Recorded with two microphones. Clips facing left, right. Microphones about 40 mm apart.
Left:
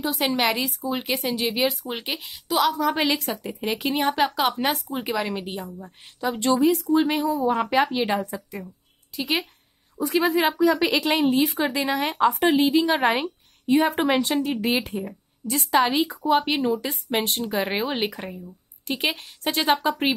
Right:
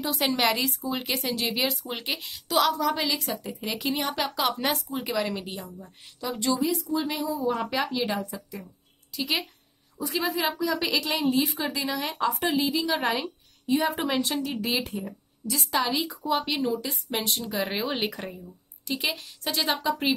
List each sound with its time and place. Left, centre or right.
0.0 s a woman's voice: centre
2.9 s a woman's voice: left
6.4 s a woman's voice: left
7.7 s a woman's voice: left
9.1 s speech: left
9.9 s a woman's voice: left
14.4 s a woman's voice: left
17.5 s speech: left
17.8 s a woman's voice: centre
18.9 s a woman's voice: left